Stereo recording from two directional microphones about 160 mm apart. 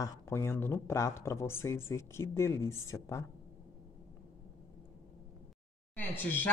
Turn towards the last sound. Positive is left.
turn(degrees=10)  # may be behind; listen again after turning